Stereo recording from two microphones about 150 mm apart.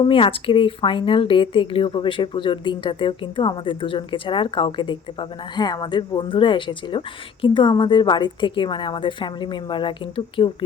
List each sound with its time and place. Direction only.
0.0 s speech: 35° left (ahead or behind)